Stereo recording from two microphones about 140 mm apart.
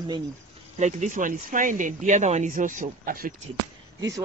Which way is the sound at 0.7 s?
60° right (ahead or behind).